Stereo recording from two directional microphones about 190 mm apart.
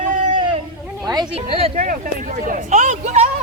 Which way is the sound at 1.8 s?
45° right (ahead or behind).